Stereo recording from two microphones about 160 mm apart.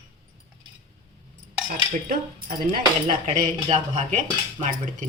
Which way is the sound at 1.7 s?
60° right (ahead or behind).